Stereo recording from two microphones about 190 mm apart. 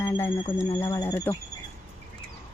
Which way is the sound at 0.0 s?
10° left (ahead or behind).